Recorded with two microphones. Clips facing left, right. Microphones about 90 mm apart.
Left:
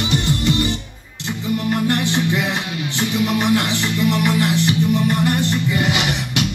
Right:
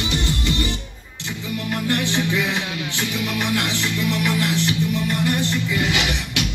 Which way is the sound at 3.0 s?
30° left (ahead or behind).